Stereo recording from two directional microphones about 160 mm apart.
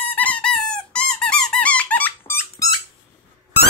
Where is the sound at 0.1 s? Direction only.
10° left (ahead or behind).